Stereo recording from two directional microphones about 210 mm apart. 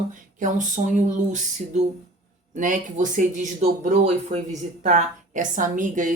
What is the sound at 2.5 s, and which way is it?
Speech, 40° right (ahead or behind).